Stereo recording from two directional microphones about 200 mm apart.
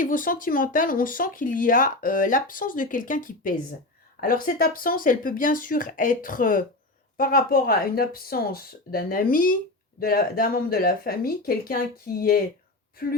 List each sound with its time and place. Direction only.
0.0 s speech: 45° left (ahead or behind)